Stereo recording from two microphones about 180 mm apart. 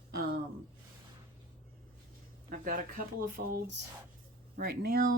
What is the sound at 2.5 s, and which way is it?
Speech, 50° right (ahead or behind).